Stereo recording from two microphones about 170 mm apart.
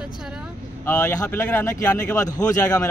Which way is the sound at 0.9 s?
15° left (ahead or behind).